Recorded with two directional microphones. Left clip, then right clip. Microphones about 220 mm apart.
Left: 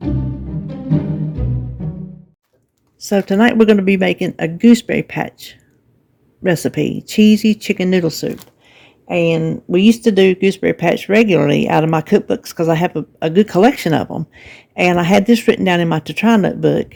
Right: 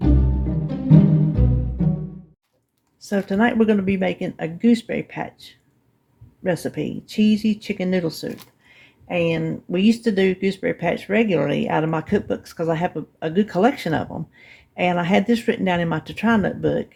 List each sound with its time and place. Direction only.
3.0 s speech: 50° left (ahead or behind)